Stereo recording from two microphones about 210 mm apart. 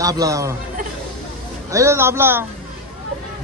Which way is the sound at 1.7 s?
15° right (ahead or behind).